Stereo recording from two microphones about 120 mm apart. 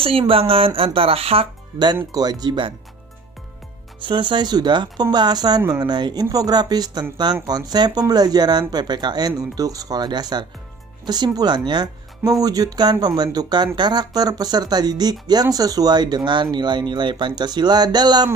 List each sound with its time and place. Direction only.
0.0 s speech: 50° right (ahead or behind)
2.1 s speech: 35° right (ahead or behind)
4.0 s speech: 40° right (ahead or behind)